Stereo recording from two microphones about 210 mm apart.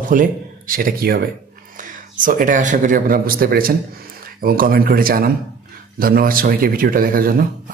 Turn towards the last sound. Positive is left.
turn(degrees=-45)  # may be behind; listen again after turning